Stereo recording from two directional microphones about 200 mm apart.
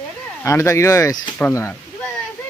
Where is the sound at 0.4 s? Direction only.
15° left (ahead or behind).